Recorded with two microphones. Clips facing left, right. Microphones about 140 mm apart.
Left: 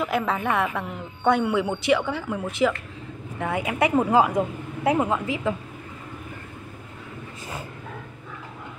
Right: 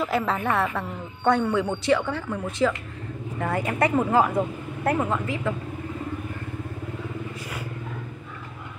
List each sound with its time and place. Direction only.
0.0 s a man's voice: centre (ahead or behind)